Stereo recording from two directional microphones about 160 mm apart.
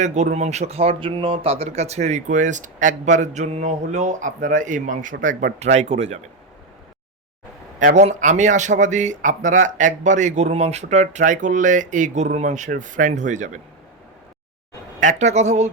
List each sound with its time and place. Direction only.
0.0 s speech: 50° right (ahead or behind)
7.8 s speech: 50° right (ahead or behind)
15.0 s speech: 45° right (ahead or behind)